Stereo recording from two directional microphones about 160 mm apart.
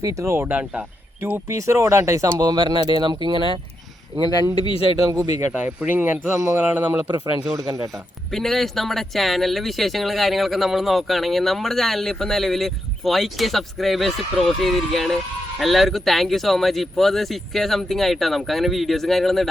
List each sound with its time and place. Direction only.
0.0 s speech: 20° right (ahead or behind); by 4.3 s 35° right (ahead or behind)
5.5 s speech: 10° right (ahead or behind)
7.5 s speech: 20° right (ahead or behind)
8.3 s speech: centre (ahead or behind)